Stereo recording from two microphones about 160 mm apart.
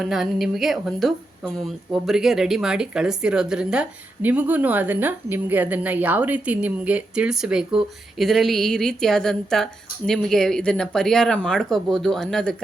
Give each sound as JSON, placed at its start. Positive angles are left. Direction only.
{"t": 0.0, "sound": "speech", "side_deg": 0}